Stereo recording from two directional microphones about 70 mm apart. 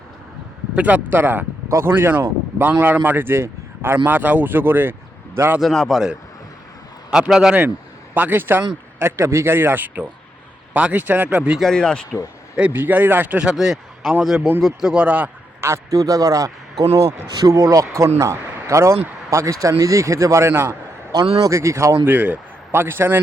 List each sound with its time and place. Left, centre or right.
0.8 s speech: right
5.5 s a man's voice: centre
7.1 s a man's voice: centre
8.1 s speech: right
11.6 s speech: centre
12.5 s a man's voice: right
15.6 s a man's voice: right
21.1 s a man's voice: right
22.0 s speech: right